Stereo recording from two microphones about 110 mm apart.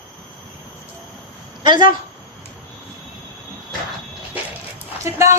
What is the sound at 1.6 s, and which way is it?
Speech, 45° right (ahead or behind).